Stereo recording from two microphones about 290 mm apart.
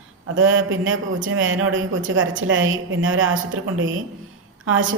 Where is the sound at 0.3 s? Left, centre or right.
Right.